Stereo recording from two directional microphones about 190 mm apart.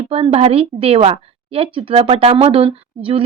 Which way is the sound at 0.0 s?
30° right (ahead or behind).